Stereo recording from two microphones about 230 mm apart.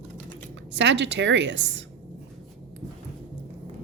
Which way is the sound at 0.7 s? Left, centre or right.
Right.